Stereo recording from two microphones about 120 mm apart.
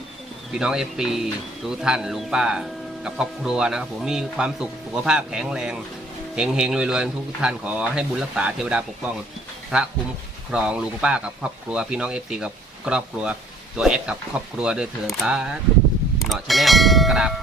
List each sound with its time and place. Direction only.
0.5 s speech: 5° right (ahead or behind)
10.5 s speech: 10° right (ahead or behind)